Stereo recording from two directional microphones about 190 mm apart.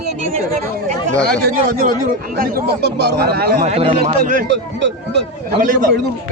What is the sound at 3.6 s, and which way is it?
Speech, 35° right (ahead or behind).